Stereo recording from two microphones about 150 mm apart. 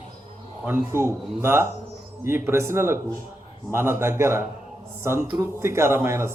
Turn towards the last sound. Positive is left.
turn(degrees=-15)  # may be behind; listen again after turning